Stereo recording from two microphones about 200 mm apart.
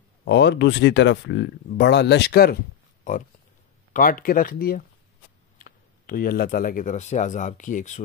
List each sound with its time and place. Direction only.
0.2 s speech: 60° left (ahead or behind)
3.0 s a sound: 40° left (ahead or behind)
3.9 s speech: 45° left (ahead or behind)